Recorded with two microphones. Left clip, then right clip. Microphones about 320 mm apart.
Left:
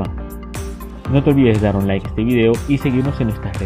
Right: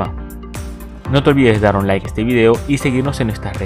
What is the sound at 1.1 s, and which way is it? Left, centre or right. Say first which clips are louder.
Speech: right 2 dB; right.